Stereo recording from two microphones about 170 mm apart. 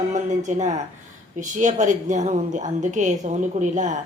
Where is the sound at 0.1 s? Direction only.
45° right (ahead or behind).